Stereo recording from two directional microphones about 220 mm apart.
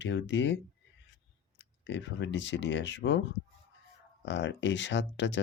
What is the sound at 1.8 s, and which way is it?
Speech, 55° left (ahead or behind).